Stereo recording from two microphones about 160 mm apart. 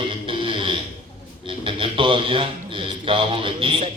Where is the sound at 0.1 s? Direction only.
35° right (ahead or behind).